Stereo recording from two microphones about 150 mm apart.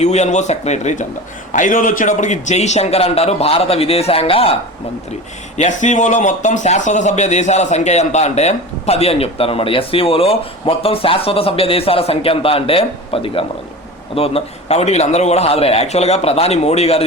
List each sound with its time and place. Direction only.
0.0 s a man's voice: 50° left (ahead or behind)
1.5 s a man's voice: 60° left (ahead or behind); by 4.5 s 40° left (ahead or behind)
5.5 s a man's voice: 55° left (ahead or behind)